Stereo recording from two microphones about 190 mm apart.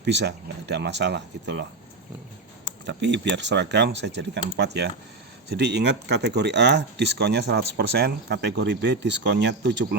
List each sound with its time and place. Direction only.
0.0 s speech: 65° right (ahead or behind)
2.8 s speech: 70° right (ahead or behind)